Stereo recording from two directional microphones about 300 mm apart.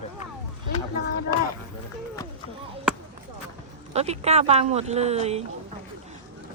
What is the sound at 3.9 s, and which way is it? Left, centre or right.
Speech, right.